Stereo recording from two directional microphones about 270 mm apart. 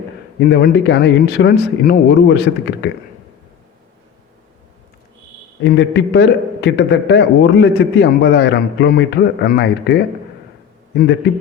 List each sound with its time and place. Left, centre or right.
0.3 s a man's voice: left
5.6 s a man's voice: left